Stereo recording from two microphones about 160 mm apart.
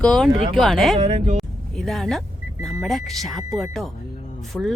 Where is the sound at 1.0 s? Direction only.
35° right (ahead or behind).